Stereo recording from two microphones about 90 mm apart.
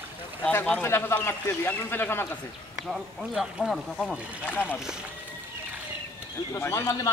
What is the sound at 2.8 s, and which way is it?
Speech, 5° right (ahead or behind).